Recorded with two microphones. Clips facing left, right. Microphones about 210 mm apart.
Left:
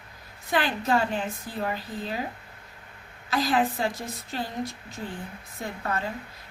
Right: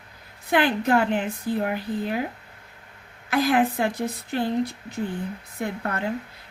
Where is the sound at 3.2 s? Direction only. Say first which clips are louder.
Right 4 dB; 55° right (ahead or behind).